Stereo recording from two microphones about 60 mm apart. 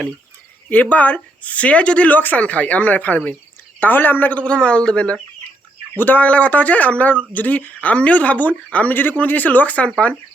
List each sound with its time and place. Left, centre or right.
0.7 s speech: left
6.0 s speech: left